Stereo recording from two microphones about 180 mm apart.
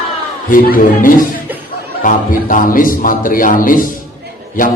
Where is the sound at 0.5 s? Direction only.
50° left (ahead or behind).